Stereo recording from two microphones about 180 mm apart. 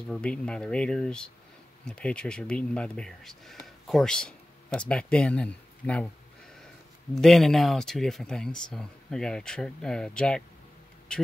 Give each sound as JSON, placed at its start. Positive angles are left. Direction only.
{"t": 0.1, "sound": "speech", "side_deg": 5}
{"t": 7.2, "sound": "speech", "side_deg": 0}